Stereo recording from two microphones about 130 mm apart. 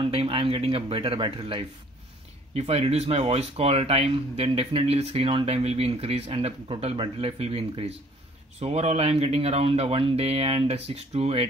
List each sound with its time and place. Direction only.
0.0 s speech: 45° right (ahead or behind)